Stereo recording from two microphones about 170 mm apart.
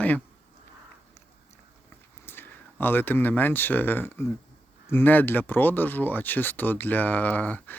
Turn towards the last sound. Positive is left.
turn(degrees=10)  # may be behind; listen again after turning